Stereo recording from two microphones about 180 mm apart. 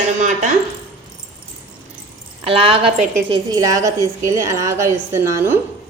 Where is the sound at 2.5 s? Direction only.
30° right (ahead or behind); by 5.5 s 15° right (ahead or behind).